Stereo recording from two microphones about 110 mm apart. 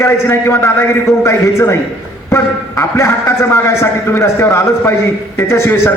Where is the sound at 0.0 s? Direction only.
25° left (ahead or behind).